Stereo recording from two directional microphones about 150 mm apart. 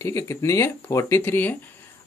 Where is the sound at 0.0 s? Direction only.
20° left (ahead or behind).